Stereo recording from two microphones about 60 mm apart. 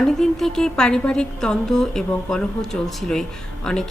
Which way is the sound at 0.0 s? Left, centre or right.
Centre.